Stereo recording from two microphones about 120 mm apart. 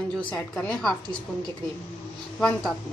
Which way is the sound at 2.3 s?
10° left (ahead or behind).